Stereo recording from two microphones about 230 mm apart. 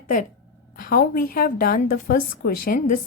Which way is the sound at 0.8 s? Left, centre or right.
Left.